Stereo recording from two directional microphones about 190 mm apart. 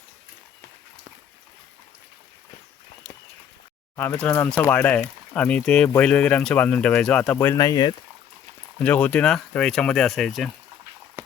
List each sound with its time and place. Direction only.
3.9 s speech: 10° left (ahead or behind)
7.3 s speech: 15° left (ahead or behind)
8.8 s speech: 5° left (ahead or behind)